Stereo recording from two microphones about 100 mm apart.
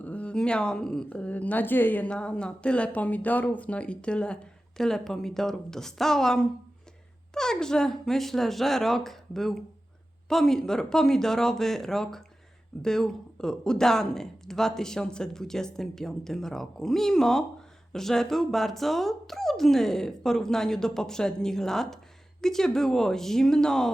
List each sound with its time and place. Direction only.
0.0 s a woman's voice: 15° left (ahead or behind)